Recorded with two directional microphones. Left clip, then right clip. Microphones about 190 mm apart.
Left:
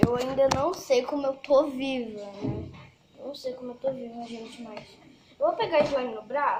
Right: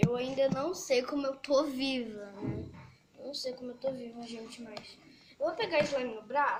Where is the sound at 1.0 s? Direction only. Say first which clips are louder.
Left 6 dB; 50° right (ahead or behind).